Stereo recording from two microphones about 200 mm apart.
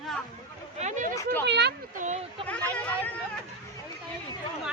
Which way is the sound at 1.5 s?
60° right (ahead or behind).